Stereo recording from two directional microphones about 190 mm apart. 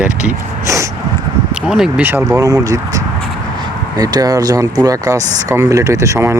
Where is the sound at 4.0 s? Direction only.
20° right (ahead or behind).